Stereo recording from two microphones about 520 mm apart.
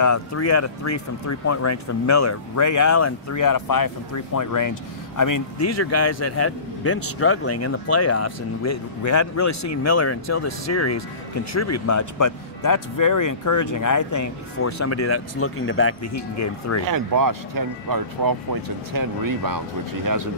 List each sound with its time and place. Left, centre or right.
0.0 s speech: left
16.8 s speech: right